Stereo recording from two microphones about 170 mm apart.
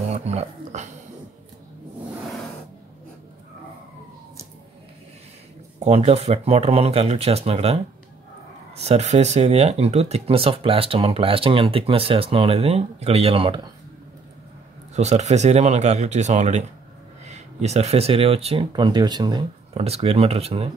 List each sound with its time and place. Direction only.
0.1 s speech: 40° right (ahead or behind)
5.8 s speech: 40° right (ahead or behind)
15.0 s speech: 40° right (ahead or behind); by 19.4 s 25° right (ahead or behind)
19.7 s speech: 35° right (ahead or behind)